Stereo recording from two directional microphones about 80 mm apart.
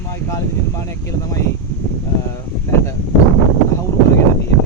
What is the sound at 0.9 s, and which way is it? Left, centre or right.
Speech, left.